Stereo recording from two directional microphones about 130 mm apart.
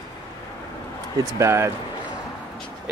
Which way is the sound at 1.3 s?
20° right (ahead or behind).